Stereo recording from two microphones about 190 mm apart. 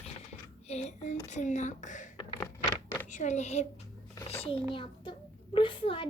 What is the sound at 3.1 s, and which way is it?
A child's voice, 40° left (ahead or behind).